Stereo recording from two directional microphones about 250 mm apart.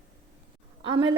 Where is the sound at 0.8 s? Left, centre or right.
Centre.